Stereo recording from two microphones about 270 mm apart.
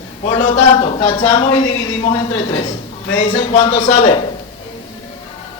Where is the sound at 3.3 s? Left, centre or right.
Left.